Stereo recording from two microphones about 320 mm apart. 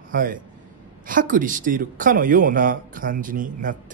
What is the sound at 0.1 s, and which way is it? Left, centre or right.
A man's voice, right.